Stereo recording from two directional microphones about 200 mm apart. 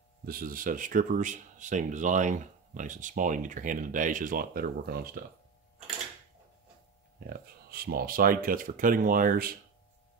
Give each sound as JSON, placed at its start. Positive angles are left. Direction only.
{"t": 0.2, "sound": "speech", "side_deg": -45}
{"t": 7.2, "sound": "speech", "side_deg": -50}